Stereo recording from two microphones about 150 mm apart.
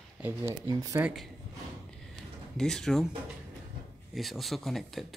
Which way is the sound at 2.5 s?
5° left (ahead or behind).